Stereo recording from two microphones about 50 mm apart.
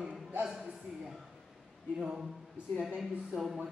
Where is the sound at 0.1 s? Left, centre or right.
Right.